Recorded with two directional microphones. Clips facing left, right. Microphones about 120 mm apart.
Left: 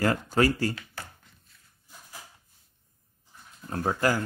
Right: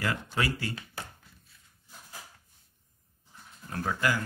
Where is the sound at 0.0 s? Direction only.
40° left (ahead or behind).